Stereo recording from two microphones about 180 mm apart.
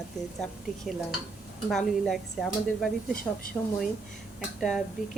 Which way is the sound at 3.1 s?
50° left (ahead or behind).